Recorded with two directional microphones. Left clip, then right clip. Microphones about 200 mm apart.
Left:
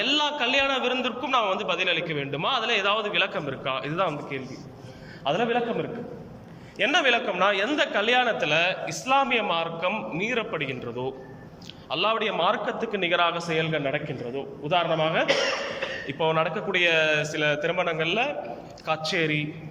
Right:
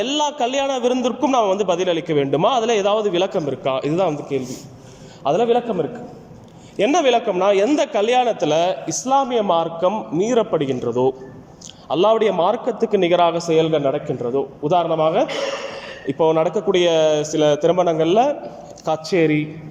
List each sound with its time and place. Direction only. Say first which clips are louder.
0.0 s a man's voice: right 4 dB; 35° right (ahead or behind)
6.7 s a man's voice: right 6 dB; 25° right (ahead or behind)